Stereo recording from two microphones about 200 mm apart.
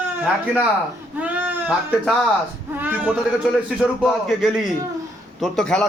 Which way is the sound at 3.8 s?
Centre (ahead or behind).